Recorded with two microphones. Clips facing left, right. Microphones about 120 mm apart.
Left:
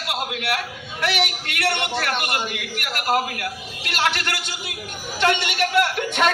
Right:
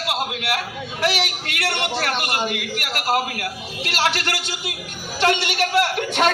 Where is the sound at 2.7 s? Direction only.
35° right (ahead or behind).